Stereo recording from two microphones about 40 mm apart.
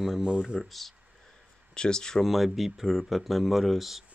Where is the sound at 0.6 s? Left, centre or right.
Centre.